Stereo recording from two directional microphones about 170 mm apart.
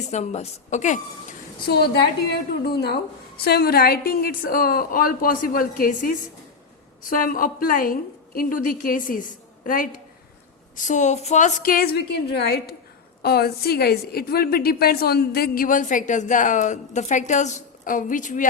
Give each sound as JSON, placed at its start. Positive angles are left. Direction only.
{"t": 0.1, "sound": "a woman's voice", "side_deg": 40}
{"t": 1.6, "sound": "a woman's voice", "side_deg": 70}